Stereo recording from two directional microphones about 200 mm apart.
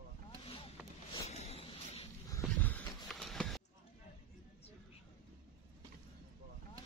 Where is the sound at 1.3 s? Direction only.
30° left (ahead or behind).